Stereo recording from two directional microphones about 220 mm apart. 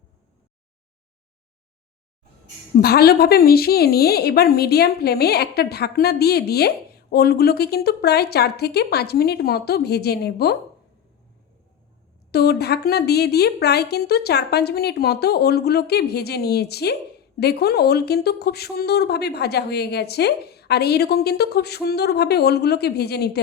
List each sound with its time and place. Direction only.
2.8 s a woman's voice: 45° left (ahead or behind)
12.3 s a woman's voice: 45° left (ahead or behind)